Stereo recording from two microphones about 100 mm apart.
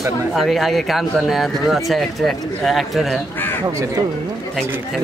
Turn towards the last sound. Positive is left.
turn(degrees=0)  # may be behind; listen again after turning